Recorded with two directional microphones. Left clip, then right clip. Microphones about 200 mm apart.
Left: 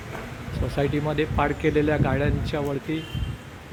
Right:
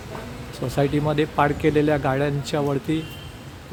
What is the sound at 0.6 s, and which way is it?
Speech, 5° right (ahead or behind).